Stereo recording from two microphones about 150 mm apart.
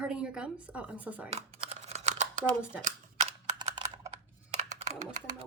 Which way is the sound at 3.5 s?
30° right (ahead or behind).